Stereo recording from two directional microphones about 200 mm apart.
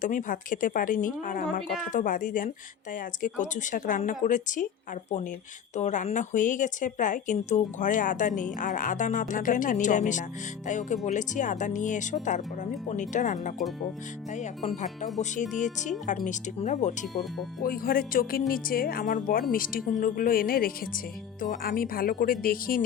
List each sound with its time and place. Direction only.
0.0 s a woman's voice: 40° left (ahead or behind)
5.7 s a woman's voice: 35° left (ahead or behind)
15.2 s a woman's voice: 40° left (ahead or behind)